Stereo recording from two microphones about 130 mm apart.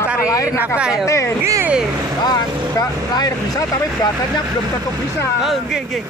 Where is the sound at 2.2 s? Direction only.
30° left (ahead or behind).